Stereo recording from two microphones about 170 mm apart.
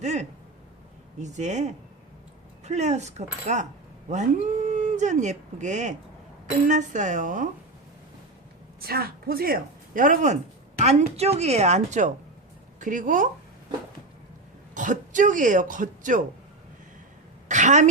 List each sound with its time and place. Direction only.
0.0 s a woman's voice: 45° right (ahead or behind)
8.9 s speech: 65° right (ahead or behind)
10.8 s a woman's voice: 40° right (ahead or behind)
14.8 s speech: 50° right (ahead or behind)
17.5 s a woman's voice: 45° right (ahead or behind)